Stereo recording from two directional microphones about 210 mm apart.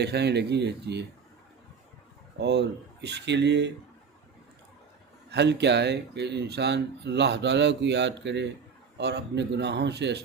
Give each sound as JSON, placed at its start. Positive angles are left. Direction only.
{"t": 0.0, "sound": "speech", "side_deg": -50}
{"t": 2.4, "sound": "speech", "side_deg": -55}
{"t": 5.3, "sound": "speech", "side_deg": -55}